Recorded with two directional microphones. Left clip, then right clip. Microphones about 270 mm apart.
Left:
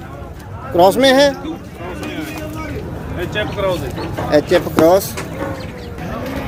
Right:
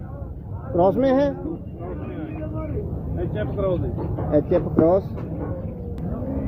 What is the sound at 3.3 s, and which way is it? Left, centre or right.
Speech, centre.